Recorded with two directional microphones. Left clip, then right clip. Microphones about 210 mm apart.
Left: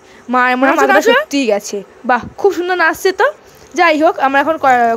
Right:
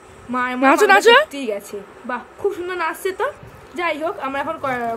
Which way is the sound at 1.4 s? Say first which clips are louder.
Left 10 dB; 50° left (ahead or behind).